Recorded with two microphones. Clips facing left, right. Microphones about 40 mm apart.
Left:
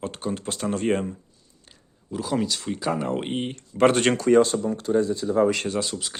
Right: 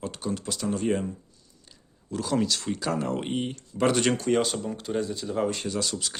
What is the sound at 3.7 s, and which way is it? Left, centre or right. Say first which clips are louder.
Speech: left 5 dB; left.